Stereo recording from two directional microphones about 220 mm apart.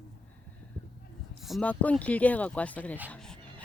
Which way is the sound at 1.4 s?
5° left (ahead or behind).